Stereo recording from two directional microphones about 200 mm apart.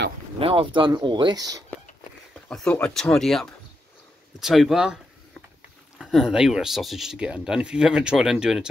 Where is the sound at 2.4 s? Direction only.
5° left (ahead or behind).